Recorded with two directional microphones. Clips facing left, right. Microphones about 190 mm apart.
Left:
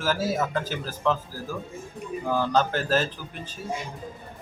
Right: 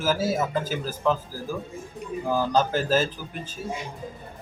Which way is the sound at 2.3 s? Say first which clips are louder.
Right 1 dB; 10° right (ahead or behind).